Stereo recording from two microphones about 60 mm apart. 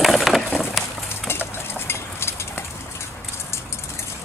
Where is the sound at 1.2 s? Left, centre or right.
Left.